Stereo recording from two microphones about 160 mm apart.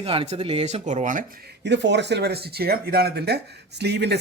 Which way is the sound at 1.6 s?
90° right.